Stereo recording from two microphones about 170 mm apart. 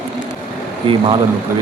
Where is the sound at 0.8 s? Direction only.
30° right (ahead or behind).